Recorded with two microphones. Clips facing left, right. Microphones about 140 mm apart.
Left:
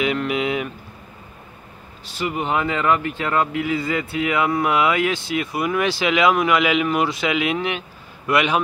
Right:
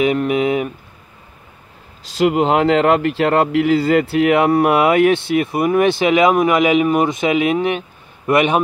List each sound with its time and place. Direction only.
0.0 s speech: 45° right (ahead or behind)
2.1 s a man's voice: 90° right; by 7.5 s 45° right (ahead or behind)